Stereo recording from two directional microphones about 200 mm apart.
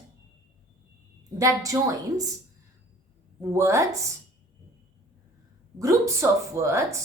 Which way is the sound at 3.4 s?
15° right (ahead or behind).